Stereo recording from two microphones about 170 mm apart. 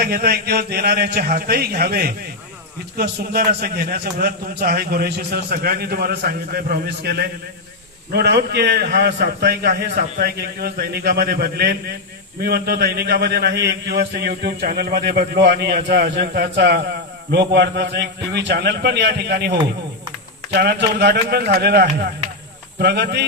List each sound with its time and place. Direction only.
0.0 s a man's voice: 65° right (ahead or behind)